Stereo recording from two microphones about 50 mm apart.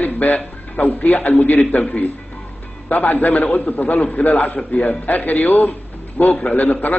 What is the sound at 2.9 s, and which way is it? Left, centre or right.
A man's voice, left.